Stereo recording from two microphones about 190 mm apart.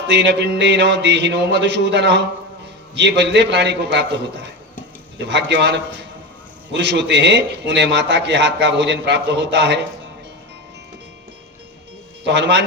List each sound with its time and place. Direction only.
0.1 s a man's voice: 65° right (ahead or behind)
12.2 s a man's voice: 65° right (ahead or behind)